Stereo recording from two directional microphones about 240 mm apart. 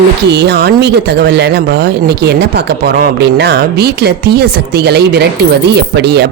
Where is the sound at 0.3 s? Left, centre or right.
Right.